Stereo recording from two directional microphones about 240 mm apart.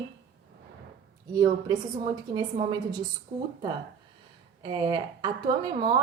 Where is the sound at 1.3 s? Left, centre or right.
Centre.